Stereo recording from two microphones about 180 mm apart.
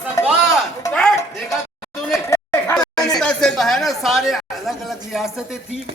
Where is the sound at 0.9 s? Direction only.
5° left (ahead or behind).